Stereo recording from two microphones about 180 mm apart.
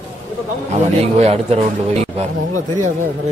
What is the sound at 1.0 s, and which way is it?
A man's voice, 35° right (ahead or behind).